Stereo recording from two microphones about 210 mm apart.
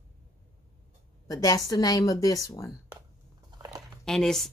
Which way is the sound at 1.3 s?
15° left (ahead or behind).